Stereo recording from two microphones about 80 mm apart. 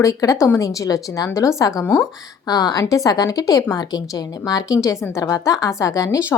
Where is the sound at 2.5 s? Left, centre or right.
Left.